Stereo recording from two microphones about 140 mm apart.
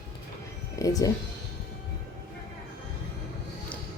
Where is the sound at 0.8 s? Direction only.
25° left (ahead or behind).